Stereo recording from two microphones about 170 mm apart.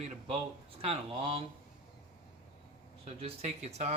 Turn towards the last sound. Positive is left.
turn(degrees=-40)  # may be behind; listen again after turning